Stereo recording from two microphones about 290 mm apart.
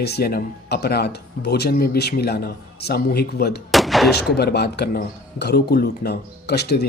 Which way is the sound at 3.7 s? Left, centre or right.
Centre.